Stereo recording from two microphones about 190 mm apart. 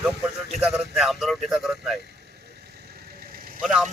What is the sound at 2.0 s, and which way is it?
Vehicle, 60° right (ahead or behind).